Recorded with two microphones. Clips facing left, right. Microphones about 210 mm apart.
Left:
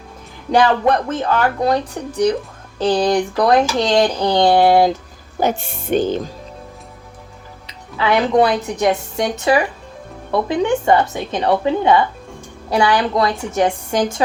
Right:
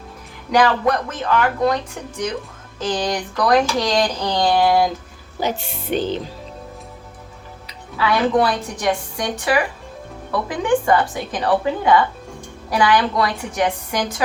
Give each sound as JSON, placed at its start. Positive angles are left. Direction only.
{"t": 0.5, "sound": "a woman's voice", "side_deg": 30}
{"t": 5.4, "sound": "speech", "side_deg": 50}
{"t": 7.9, "sound": "speech", "side_deg": 25}